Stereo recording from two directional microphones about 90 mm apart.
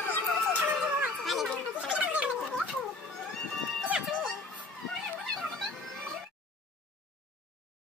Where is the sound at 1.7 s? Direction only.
15° right (ahead or behind).